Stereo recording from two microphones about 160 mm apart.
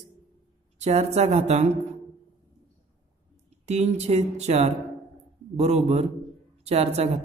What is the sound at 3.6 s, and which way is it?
Speech, 45° right (ahead or behind).